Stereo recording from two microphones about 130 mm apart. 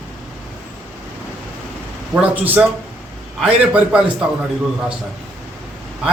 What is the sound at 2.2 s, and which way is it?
Speech, 10° right (ahead or behind).